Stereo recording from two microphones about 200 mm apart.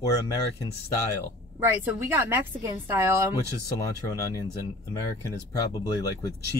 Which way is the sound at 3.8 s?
15° left (ahead or behind).